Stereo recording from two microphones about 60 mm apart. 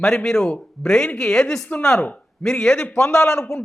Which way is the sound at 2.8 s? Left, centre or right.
Left.